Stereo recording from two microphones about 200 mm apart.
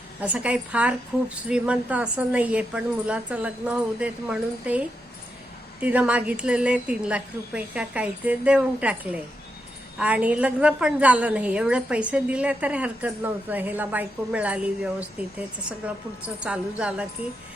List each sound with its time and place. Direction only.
0.2 s a woman's voice: 5° right (ahead or behind)
5.8 s a woman's voice: 5° right (ahead or behind)